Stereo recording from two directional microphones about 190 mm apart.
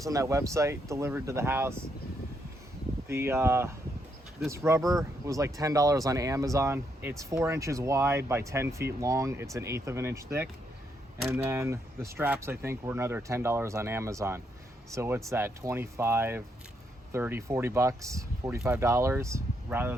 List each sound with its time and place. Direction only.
0.0 s speech: 15° right (ahead or behind)
3.1 s speech: 15° right (ahead or behind)
11.3 s speech: 15° right (ahead or behind)